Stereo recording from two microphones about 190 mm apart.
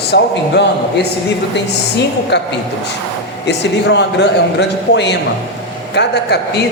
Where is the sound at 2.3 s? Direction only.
65° left (ahead or behind).